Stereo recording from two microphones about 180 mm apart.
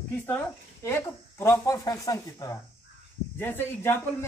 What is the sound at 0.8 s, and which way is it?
Speech, 15° left (ahead or behind).